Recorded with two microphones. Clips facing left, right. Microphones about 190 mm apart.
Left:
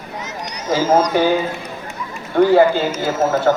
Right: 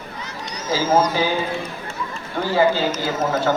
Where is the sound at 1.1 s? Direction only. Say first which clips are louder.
Left 6 dB; 60° left (ahead or behind).